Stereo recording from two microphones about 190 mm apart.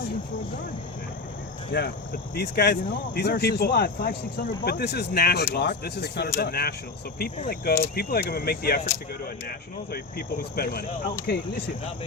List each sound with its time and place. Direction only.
1.7 s speech: 65° left (ahead or behind)